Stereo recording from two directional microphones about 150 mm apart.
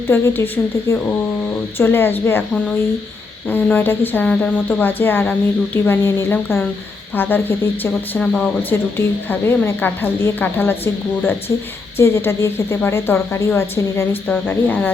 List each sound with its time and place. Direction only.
0.1 s speech: 15° left (ahead or behind)
11.9 s speech: 15° left (ahead or behind)